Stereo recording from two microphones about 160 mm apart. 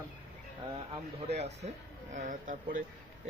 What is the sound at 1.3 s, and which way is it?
Speech, 45° right (ahead or behind).